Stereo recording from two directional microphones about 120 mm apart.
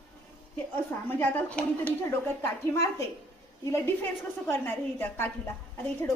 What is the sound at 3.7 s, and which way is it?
A woman's voice, 20° left (ahead or behind).